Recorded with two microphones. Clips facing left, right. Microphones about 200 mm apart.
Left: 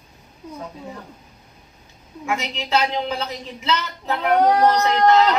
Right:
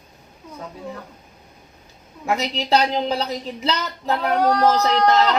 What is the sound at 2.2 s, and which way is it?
A woman's voice, 35° right (ahead or behind).